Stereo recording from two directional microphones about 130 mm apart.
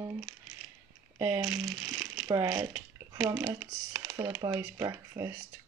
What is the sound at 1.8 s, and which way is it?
Speech, 20° right (ahead or behind).